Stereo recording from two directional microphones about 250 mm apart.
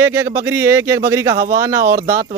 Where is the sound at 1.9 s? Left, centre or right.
Right.